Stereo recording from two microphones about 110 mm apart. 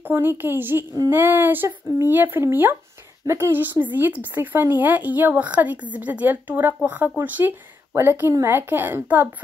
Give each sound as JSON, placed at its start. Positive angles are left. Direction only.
{"t": 0.0, "sound": "a woman's voice", "side_deg": -20}